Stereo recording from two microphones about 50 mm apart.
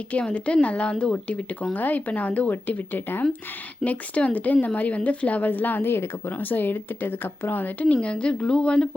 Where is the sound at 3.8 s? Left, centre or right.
Left.